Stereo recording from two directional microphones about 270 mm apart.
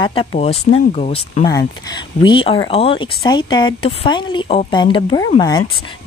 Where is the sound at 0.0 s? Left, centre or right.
Centre.